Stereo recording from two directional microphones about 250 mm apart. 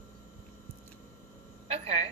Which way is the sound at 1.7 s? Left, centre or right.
Right.